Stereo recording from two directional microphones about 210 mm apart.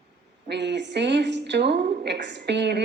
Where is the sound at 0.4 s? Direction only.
55° right (ahead or behind).